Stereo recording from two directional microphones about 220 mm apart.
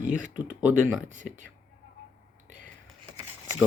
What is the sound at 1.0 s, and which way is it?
Speech, 35° right (ahead or behind).